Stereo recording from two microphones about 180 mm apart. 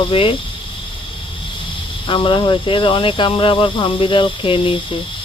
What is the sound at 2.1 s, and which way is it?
Speech, 25° left (ahead or behind).